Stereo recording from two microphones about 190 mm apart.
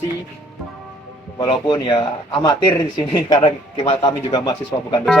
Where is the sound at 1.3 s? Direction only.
25° left (ahead or behind).